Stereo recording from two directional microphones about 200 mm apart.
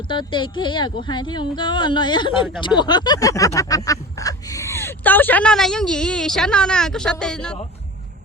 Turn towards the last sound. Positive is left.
turn(degrees=5)  # may be behind; listen again after turning